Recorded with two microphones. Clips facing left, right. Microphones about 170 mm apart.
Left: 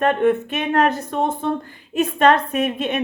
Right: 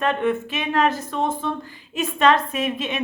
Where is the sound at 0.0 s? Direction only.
50° left (ahead or behind).